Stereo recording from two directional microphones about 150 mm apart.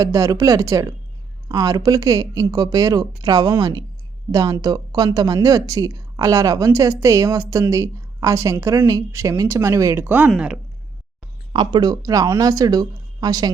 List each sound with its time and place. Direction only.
0.0 s a woman's voice: 20° right (ahead or behind); by 10.6 s 5° right (ahead or behind)
11.5 s a woman's voice: 30° right (ahead or behind)